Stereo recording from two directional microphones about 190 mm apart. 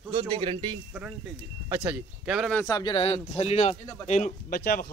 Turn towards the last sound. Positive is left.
turn(degrees=55)  # may be behind; listen again after turning